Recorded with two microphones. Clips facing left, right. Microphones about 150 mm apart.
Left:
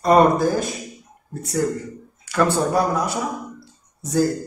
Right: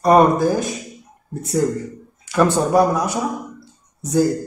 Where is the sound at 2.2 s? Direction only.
20° right (ahead or behind).